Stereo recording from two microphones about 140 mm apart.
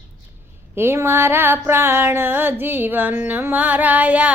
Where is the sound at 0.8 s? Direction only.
15° right (ahead or behind).